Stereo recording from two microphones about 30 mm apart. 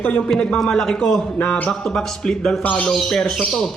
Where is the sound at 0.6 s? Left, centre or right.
Centre.